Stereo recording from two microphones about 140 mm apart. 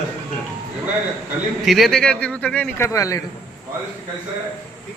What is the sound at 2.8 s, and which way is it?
Speech, 20° left (ahead or behind).